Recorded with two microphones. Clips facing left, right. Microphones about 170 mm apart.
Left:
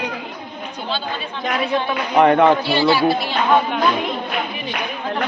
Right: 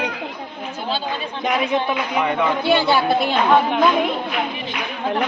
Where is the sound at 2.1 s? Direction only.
60° left (ahead or behind).